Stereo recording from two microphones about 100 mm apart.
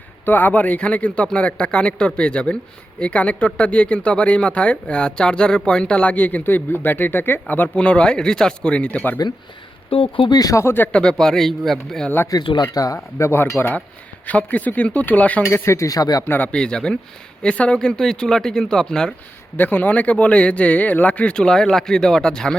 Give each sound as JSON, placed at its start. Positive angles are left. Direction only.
{"t": 0.3, "sound": "speech", "side_deg": 15}
{"t": 9.9, "sound": "speech", "side_deg": 60}
{"t": 10.3, "sound": "speech", "side_deg": 35}
{"t": 10.9, "sound": "a man's voice", "side_deg": 5}
{"t": 12.4, "sound": "speech", "side_deg": 50}
{"t": 12.7, "sound": "speech", "side_deg": 35}
{"t": 15.4, "sound": "speech", "side_deg": 30}
{"t": 16.2, "sound": "speech", "side_deg": 20}
{"t": 19.5, "sound": "speech", "side_deg": 20}